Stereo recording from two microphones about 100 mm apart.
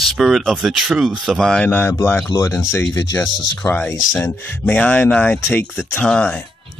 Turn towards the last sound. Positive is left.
turn(degrees=10)  # may be behind; listen again after turning